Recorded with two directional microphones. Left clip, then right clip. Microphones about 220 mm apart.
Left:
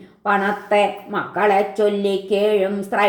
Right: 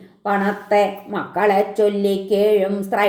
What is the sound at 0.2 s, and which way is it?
Speech, 30° right (ahead or behind).